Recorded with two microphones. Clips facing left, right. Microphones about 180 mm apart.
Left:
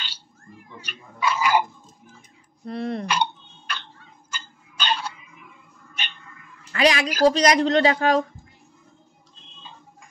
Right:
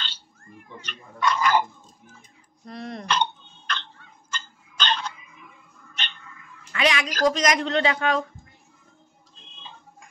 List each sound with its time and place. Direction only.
0.7 s speech: 10° left (ahead or behind)
2.6 s speech: 30° left (ahead or behind)
3.1 s dog: 10° left (ahead or behind)
4.3 s tick-tock: 10° left (ahead or behind)
6.0 s a sound: 10° left (ahead or behind)
6.7 s a woman's voice: 35° left (ahead or behind)